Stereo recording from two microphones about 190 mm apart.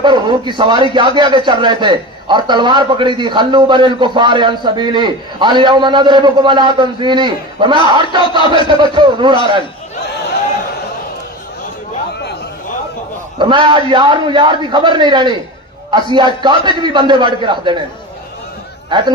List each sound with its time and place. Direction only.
0.0 s a man's voice: 25° right (ahead or behind)
13.4 s a man's voice: 25° right (ahead or behind)
18.9 s speech: 25° right (ahead or behind)